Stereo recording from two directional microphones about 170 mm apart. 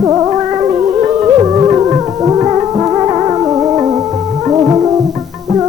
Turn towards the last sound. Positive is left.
turn(degrees=-20)  # may be behind; listen again after turning